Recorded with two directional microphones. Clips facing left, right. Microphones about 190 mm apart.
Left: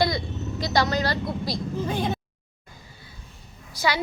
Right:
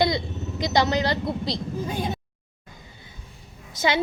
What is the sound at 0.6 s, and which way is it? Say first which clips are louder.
Speech: right 2 dB; 20° right (ahead or behind).